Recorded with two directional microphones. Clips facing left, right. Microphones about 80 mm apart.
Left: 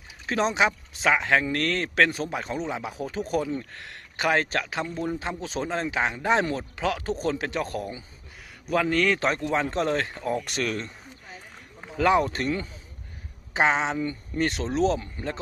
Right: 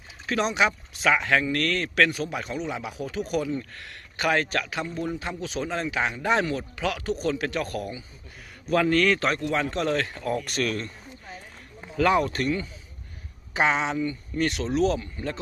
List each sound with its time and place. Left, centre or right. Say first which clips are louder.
0.3 s a man's voice: even; left
8.6 s a man's voice: right 2 dB; centre
9.5 s a man's voice: left 1 dB; left